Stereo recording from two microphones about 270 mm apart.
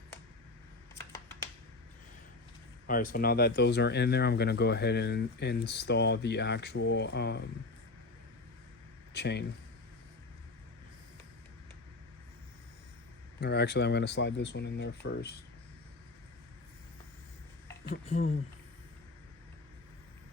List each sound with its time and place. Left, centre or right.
0.9 s computer keyboard: centre
2.8 s speech: left
9.1 s speech: left
13.4 s speech: left
17.8 s speech: left